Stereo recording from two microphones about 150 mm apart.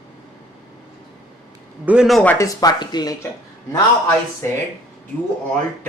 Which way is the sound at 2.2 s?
10° left (ahead or behind).